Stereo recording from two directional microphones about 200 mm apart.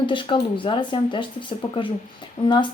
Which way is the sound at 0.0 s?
25° left (ahead or behind).